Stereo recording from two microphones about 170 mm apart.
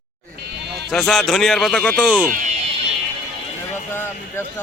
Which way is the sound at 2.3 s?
45° right (ahead or behind).